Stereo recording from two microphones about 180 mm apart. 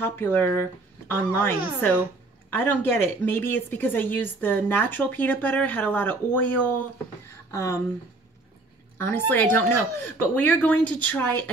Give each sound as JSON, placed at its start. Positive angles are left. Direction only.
{"t": 0.0, "sound": "speech", "side_deg": 10}
{"t": 7.2, "sound": "a sound", "side_deg": 15}
{"t": 8.9, "sound": "speech", "side_deg": 10}